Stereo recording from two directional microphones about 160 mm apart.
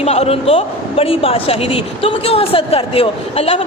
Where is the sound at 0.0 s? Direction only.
40° left (ahead or behind).